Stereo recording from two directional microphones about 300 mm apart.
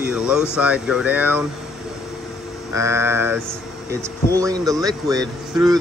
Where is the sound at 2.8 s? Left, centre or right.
Centre.